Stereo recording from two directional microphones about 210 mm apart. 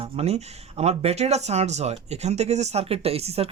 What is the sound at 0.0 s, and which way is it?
Speech, 30° right (ahead or behind).